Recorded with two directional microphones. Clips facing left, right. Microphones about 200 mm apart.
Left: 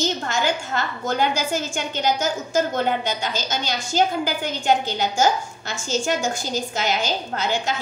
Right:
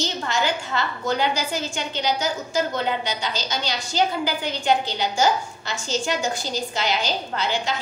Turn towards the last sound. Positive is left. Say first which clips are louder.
# left 1 dB
turn(degrees=45)  # may be behind; listen again after turning